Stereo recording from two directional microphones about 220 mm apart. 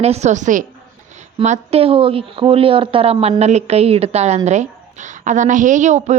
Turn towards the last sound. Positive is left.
turn(degrees=-30)  # may be behind; listen again after turning